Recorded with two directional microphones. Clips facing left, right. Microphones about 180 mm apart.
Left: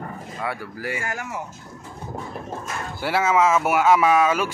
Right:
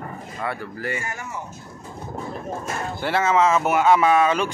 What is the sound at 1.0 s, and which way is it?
Speech, 90° left.